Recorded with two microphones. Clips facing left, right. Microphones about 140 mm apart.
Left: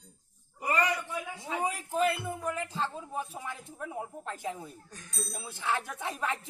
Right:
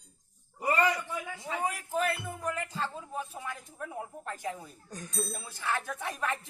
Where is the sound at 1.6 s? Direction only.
15° left (ahead or behind).